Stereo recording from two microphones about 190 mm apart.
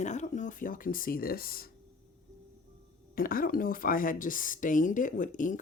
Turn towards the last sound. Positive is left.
turn(degrees=45)  # may be behind; listen again after turning